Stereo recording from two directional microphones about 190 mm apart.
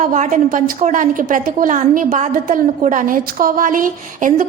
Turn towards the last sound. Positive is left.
turn(degrees=-45)  # may be behind; listen again after turning